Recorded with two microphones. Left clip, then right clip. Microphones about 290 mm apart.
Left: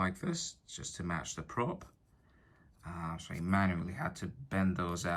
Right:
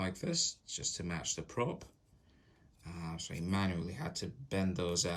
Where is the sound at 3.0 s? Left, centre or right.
Centre.